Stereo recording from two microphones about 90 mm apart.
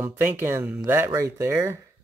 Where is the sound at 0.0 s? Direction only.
25° right (ahead or behind).